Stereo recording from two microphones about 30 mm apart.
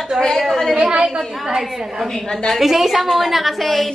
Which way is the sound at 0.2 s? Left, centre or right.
Right.